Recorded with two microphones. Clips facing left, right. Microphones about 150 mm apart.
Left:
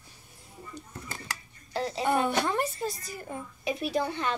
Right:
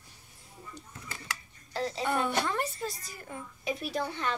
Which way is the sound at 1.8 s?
5° left (ahead or behind).